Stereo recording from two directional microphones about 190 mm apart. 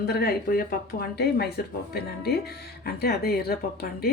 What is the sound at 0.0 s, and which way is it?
A woman's voice, 55° left (ahead or behind).